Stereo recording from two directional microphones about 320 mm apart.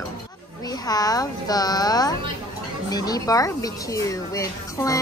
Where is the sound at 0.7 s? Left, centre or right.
Centre.